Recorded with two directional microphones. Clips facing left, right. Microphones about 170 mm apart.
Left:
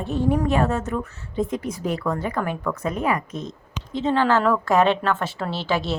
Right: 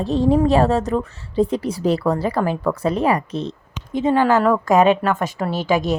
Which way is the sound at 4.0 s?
15° right (ahead or behind).